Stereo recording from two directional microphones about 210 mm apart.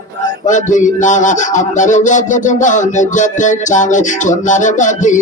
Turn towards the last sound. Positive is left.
turn(degrees=35)  # may be behind; listen again after turning